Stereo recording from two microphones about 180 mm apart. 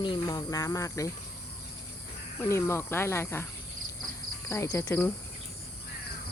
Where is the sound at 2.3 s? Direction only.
15° left (ahead or behind).